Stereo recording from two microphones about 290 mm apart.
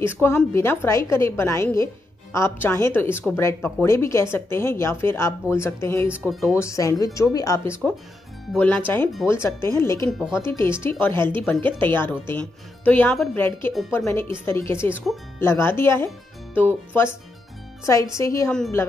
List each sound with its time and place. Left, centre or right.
0.0 s speech: centre
6.0 s speech: centre
6.4 s speech: centre
18.1 s speech: centre